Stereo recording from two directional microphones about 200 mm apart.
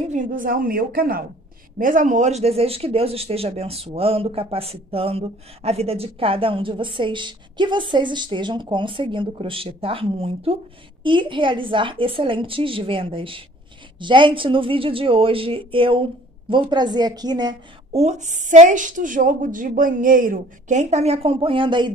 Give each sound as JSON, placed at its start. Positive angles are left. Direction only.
{"t": 0.1, "sound": "a woman's voice", "side_deg": -45}
{"t": 18.0, "sound": "a woman's voice", "side_deg": -35}